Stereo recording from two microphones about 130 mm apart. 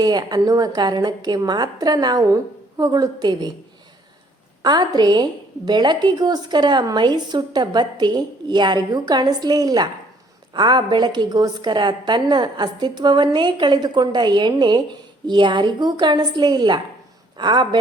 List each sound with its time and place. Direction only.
0.0 s a woman's voice: 30° right (ahead or behind)
4.6 s a woman's voice: 35° right (ahead or behind)